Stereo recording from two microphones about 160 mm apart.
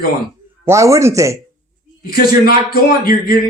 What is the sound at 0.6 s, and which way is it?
Speech, 20° right (ahead or behind).